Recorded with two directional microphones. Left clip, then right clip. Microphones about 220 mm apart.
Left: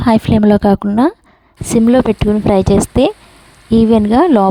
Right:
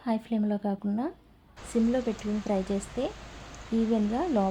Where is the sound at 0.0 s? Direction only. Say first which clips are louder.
Left 19 dB; 50° left (ahead or behind).